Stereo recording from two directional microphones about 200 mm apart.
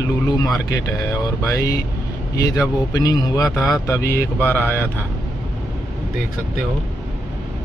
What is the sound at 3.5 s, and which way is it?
Speech, centre (ahead or behind).